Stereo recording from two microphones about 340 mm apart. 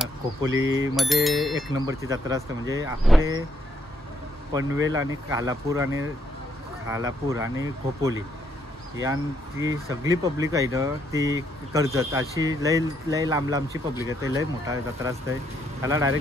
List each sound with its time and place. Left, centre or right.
0.5 s speech: right
0.9 s bicycle bell: centre
1.7 s speech: centre
4.5 s speech: centre